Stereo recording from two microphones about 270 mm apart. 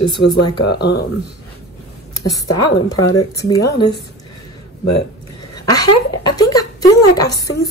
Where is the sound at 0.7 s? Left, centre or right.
Left.